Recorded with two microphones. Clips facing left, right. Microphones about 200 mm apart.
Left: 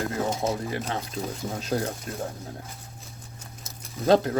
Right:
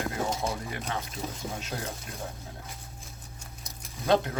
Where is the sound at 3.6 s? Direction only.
40° left (ahead or behind).